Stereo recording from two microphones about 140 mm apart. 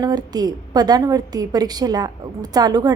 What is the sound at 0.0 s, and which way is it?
A woman's voice, 30° right (ahead or behind).